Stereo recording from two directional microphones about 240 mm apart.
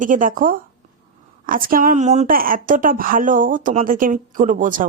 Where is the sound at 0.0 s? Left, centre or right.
Right.